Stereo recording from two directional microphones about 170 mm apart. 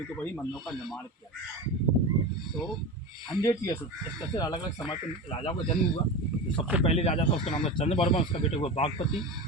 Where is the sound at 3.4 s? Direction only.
20° left (ahead or behind).